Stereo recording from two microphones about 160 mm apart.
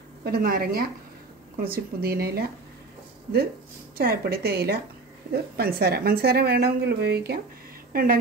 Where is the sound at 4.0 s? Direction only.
75° right (ahead or behind).